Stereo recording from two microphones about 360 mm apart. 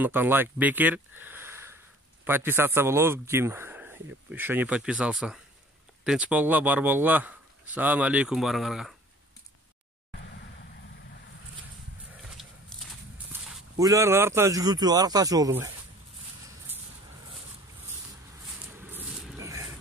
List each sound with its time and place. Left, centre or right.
0.0 s speech: centre
10.1 s vehicle: left
12.4 s horse: centre
13.3 s speech: centre
18.7 s a sound: centre